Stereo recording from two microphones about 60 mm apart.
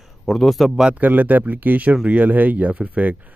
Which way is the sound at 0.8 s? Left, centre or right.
Right.